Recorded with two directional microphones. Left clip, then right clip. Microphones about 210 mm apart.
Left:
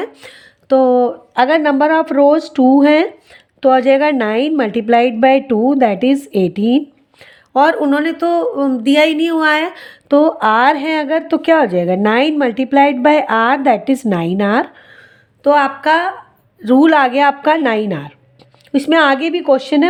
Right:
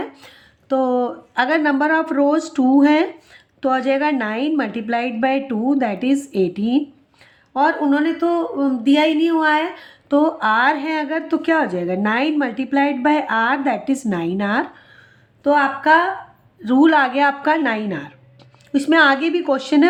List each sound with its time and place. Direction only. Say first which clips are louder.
0.0 s a man's voice: left 5 dB; 35° left (ahead or behind)
7.5 s a man's voice: left 5 dB; 45° left (ahead or behind)
16.6 s a man's voice: left 4 dB; 30° left (ahead or behind)